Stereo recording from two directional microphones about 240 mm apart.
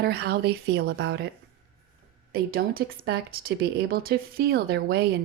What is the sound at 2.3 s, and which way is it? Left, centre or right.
Speech, right.